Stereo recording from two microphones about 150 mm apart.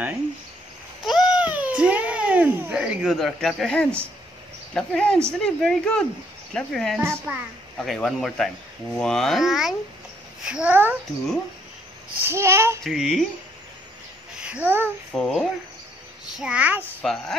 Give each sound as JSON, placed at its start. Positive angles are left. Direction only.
{"t": 1.0, "sound": "a child's voice", "side_deg": -5}
{"t": 7.0, "sound": "a child's voice", "side_deg": -15}
{"t": 7.7, "sound": "a child's voice", "side_deg": 0}
{"t": 12.2, "sound": "a child's voice", "side_deg": -15}
{"t": 12.8, "sound": "a child's voice", "side_deg": 0}
{"t": 14.4, "sound": "a child's voice", "side_deg": -10}
{"t": 15.1, "sound": "a child's voice", "side_deg": 5}
{"t": 16.3, "sound": "a child's voice", "side_deg": -5}
{"t": 17.0, "sound": "a child's voice", "side_deg": 5}